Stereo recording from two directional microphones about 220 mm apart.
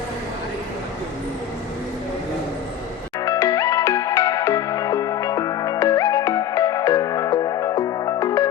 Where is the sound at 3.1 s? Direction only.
15° left (ahead or behind).